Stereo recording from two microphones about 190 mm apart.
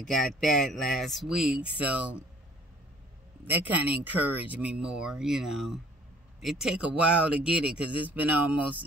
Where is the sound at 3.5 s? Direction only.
10° right (ahead or behind).